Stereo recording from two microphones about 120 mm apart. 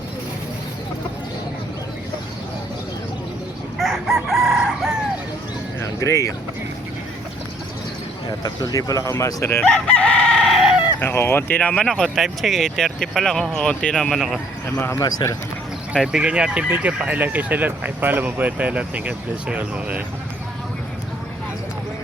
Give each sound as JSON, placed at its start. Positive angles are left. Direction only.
{"t": 3.8, "sound": "chicken", "side_deg": -5}
{"t": 5.8, "sound": "music", "side_deg": 25}
{"t": 8.4, "sound": "speech", "side_deg": 30}
{"t": 9.6, "sound": "chicken", "side_deg": 10}
{"t": 11.0, "sound": "speech", "side_deg": 20}
{"t": 14.8, "sound": "speech", "side_deg": 20}
{"t": 16.0, "sound": "speech", "side_deg": -10}